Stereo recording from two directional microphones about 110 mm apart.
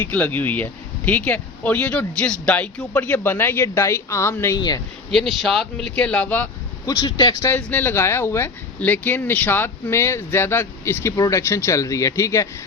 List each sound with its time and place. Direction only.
0.0 s speech: 15° left (ahead or behind)
4.5 s speech: 40° left (ahead or behind)
5.1 s speech: centre (ahead or behind)
6.0 s speech: 15° left (ahead or behind)
6.8 s speech: 40° left (ahead or behind)
7.4 s speech: 20° left (ahead or behind)